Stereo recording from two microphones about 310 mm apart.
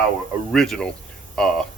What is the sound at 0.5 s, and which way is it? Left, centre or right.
Speech, centre.